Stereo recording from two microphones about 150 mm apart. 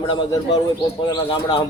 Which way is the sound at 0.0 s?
30° left (ahead or behind).